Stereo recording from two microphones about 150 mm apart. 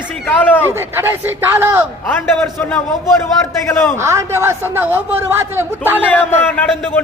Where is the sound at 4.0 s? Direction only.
20° right (ahead or behind).